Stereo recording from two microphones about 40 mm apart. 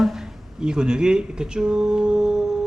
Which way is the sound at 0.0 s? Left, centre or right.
Centre.